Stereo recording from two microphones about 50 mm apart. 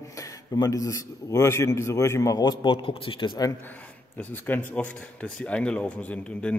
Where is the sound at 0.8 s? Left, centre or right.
Left.